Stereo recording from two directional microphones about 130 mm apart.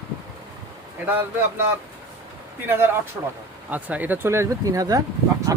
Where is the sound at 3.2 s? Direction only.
20° right (ahead or behind).